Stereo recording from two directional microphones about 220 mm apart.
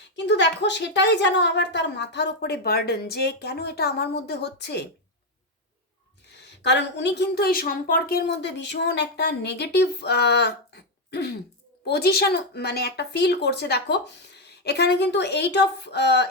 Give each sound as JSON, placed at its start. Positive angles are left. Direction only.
{"t": 0.3, "sound": "a woman's voice", "side_deg": 50}
{"t": 6.2, "sound": "a woman's voice", "side_deg": 50}